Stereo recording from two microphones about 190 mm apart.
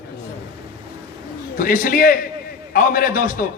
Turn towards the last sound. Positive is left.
turn(degrees=50)  # may be behind; listen again after turning